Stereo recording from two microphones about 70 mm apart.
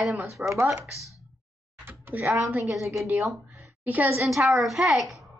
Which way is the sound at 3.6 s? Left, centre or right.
Right.